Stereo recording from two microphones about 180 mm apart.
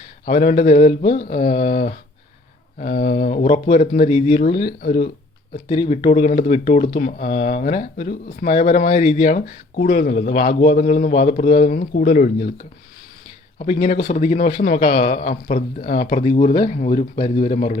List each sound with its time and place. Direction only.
0.3 s speech: 40° left (ahead or behind)
4.6 s speech: 50° left (ahead or behind)
5.6 s speech: 30° left (ahead or behind)
9.2 s speech: 45° left (ahead or behind)
14.0 s speech: 40° left (ahead or behind)
16.2 s speech: 30° left (ahead or behind)